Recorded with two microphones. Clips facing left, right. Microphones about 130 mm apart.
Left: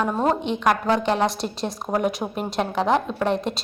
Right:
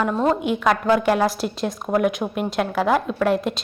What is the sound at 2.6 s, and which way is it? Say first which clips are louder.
Speech: right 1 dB; 25° left (ahead or behind).